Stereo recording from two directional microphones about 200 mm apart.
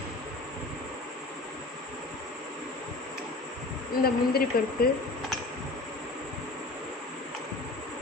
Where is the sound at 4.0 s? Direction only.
50° left (ahead or behind).